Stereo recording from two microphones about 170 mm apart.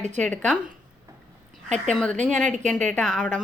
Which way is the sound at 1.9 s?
5° left (ahead or behind).